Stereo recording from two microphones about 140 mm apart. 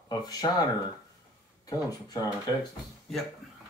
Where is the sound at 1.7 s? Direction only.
25° left (ahead or behind).